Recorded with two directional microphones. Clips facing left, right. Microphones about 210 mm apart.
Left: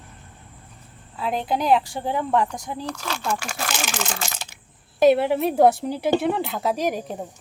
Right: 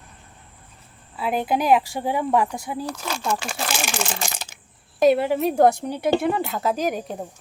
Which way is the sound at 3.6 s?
10° right (ahead or behind).